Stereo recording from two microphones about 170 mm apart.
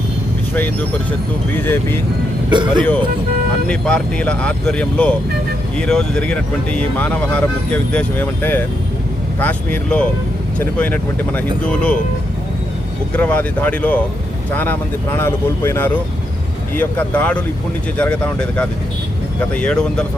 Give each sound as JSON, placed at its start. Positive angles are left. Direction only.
{"t": 0.5, "sound": "speech", "side_deg": 10}
{"t": 2.5, "sound": "speech", "side_deg": -25}
{"t": 3.7, "sound": "speech", "side_deg": 5}
{"t": 13.1, "sound": "speech", "side_deg": 10}